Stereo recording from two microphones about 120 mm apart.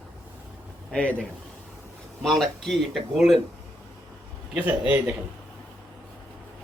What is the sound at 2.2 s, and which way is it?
Speech, 5° left (ahead or behind).